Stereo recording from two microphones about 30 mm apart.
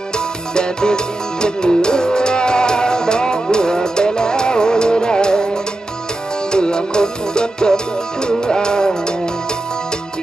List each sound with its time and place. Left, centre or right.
0.6 s music: left
6.5 s music: left